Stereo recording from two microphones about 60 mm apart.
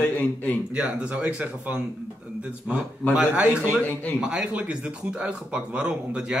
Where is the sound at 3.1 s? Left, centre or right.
Centre.